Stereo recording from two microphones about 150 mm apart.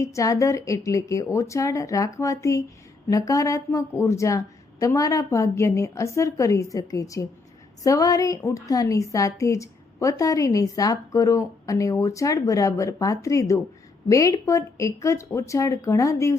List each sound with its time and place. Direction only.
0.0 s a woman's voice: 20° left (ahead or behind)